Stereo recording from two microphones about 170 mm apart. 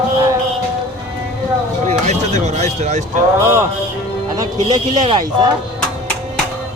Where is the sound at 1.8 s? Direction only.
40° right (ahead or behind).